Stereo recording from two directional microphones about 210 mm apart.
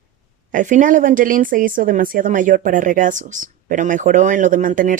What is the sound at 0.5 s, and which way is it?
Speech, 35° right (ahead or behind).